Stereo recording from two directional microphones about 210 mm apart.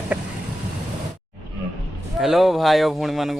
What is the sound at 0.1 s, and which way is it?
Vehicle, 5° right (ahead or behind).